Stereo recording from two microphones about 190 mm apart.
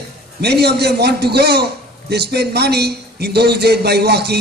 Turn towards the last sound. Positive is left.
turn(degrees=-60)  # may be behind; listen again after turning